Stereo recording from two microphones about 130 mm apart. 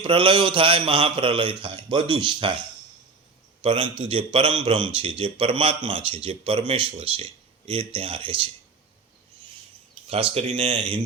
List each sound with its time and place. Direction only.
0.0 s a man's voice: 40° right (ahead or behind)
3.6 s a man's voice: 45° right (ahead or behind)
10.1 s a man's voice: 50° right (ahead or behind)